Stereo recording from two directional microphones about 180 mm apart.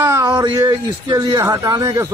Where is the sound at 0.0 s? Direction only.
20° right (ahead or behind).